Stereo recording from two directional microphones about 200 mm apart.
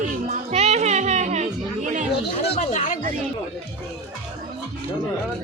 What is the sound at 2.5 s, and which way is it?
Speech, 35° left (ahead or behind).